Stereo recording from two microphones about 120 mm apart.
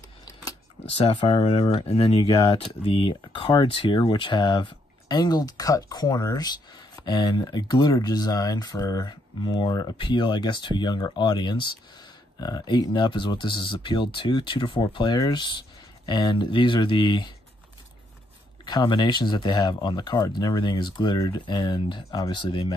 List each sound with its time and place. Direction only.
0.8 s speech: 50° left (ahead or behind)
18.7 s speech: 35° left (ahead or behind)